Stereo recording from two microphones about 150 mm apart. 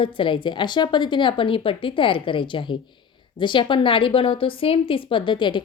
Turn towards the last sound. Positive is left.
turn(degrees=30)  # may be behind; listen again after turning